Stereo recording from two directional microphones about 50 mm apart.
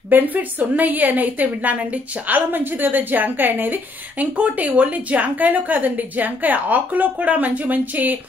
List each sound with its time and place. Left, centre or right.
0.1 s a woman's voice: right
4.4 s a woman's voice: right